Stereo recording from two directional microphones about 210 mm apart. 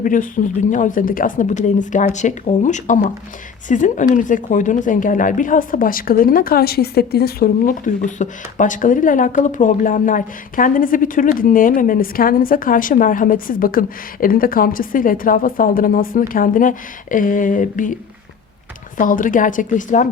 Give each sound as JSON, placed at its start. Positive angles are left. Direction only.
{"t": 0.0, "sound": "a woman's voice", "side_deg": 40}
{"t": 18.9, "sound": "a woman's voice", "side_deg": 40}